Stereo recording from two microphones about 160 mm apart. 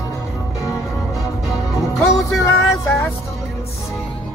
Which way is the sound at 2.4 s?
15° left (ahead or behind).